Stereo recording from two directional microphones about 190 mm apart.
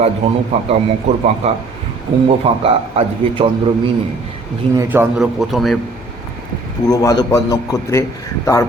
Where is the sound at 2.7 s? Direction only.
30° right (ahead or behind).